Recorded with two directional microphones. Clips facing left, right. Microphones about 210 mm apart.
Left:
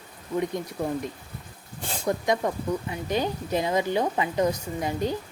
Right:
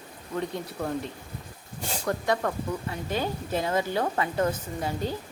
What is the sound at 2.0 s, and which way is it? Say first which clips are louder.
Speech: left 2 dB; 15° left (ahead or behind).